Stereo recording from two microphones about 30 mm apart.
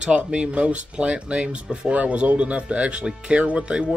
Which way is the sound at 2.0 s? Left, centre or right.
Right.